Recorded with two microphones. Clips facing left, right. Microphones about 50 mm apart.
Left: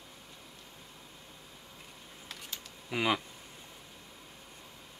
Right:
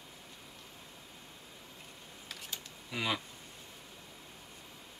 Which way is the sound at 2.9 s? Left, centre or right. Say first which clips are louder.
Left 5 dB; left.